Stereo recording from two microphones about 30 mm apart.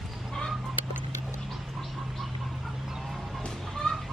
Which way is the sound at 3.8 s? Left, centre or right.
Left.